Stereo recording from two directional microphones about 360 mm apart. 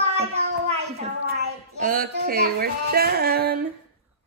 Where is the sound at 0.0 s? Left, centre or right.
Centre.